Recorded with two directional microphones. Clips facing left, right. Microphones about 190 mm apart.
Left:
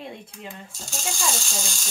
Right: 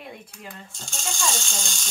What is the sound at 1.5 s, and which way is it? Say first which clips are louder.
Speech: left 2 dB; 5° left (ahead or behind).